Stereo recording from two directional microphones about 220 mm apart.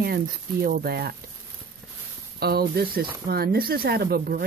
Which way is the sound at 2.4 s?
45° right (ahead or behind).